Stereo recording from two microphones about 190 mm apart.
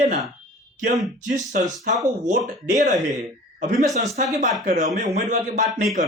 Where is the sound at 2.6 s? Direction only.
40° right (ahead or behind).